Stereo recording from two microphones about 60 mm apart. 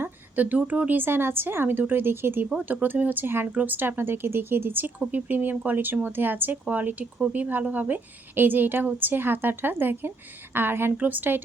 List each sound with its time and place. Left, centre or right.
0.0 s speech: right
10.9 s speech: right